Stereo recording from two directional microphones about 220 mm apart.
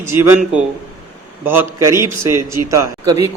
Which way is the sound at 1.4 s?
10° right (ahead or behind).